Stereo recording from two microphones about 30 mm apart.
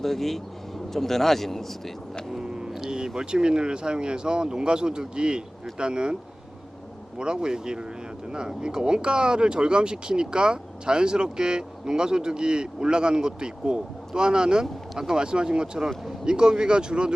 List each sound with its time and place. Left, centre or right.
0.0 s a man's voice: centre
2.4 s a sound: right
3.2 s speech: right
7.2 s speech: right